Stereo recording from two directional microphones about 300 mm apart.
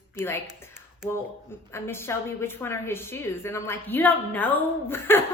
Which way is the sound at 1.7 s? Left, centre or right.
Centre.